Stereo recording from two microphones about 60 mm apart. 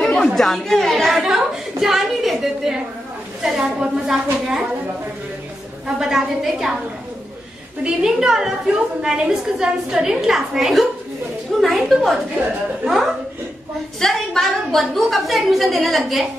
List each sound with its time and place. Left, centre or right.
0.3 s a woman's voice: centre
1.2 s a sound: centre
3.4 s a woman's voice: centre
5.9 s a woman's voice: centre
7.8 s a woman's voice: centre
13.9 s a woman's voice: centre